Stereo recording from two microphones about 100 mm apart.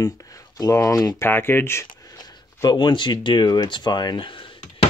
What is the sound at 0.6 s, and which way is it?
Speech, 35° left (ahead or behind).